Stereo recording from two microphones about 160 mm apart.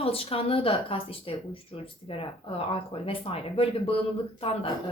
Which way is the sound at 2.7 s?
35° left (ahead or behind).